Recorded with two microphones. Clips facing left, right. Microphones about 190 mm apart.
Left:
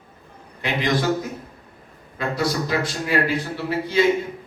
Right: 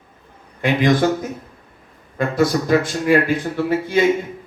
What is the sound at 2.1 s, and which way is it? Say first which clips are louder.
A man's voice: right 6 dB; 50° right (ahead or behind).